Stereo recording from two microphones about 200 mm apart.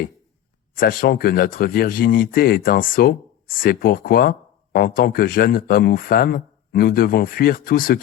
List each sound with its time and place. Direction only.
0.8 s speech: 45° left (ahead or behind)